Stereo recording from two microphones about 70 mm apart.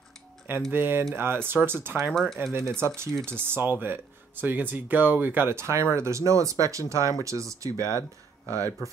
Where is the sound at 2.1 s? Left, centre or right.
Centre.